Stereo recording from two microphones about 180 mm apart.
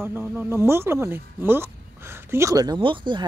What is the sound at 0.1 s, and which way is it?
Speech, 10° right (ahead or behind).